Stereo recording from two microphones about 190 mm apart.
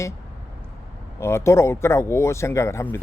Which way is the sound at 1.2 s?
15° left (ahead or behind).